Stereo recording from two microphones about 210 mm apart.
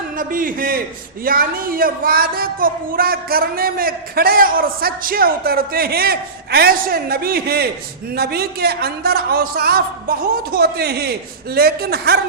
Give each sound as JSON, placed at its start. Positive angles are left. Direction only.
{"t": 0.2, "sound": "a man's voice", "side_deg": -40}